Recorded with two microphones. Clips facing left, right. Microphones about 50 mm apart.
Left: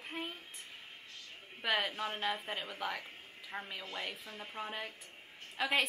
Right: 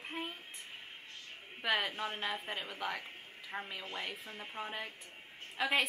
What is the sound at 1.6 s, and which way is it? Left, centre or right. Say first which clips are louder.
Speech: even; centre.